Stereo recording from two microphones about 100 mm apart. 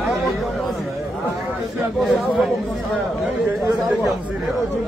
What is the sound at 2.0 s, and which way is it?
Speech, centre (ahead or behind).